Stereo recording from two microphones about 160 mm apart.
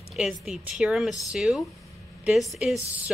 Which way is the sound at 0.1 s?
Centre (ahead or behind).